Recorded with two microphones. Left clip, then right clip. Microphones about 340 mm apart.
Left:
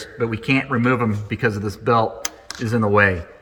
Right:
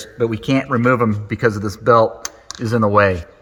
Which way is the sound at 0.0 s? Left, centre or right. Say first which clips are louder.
Right 4 dB; right.